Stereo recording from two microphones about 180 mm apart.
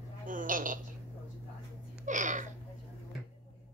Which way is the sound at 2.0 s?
45° right (ahead or behind).